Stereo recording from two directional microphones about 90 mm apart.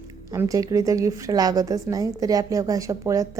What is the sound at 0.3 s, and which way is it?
A woman's voice, 40° right (ahead or behind).